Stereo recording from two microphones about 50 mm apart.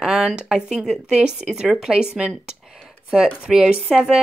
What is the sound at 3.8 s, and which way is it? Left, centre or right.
Speech, centre.